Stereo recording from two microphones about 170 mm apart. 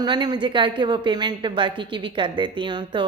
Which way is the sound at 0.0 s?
25° right (ahead or behind).